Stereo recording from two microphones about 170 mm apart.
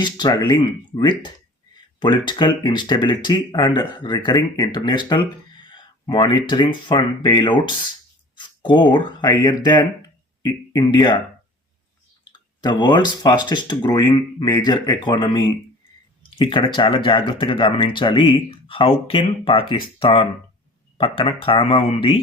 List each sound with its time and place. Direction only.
0.0 s speech: 25° left (ahead or behind)
12.3 s speech: 25° left (ahead or behind)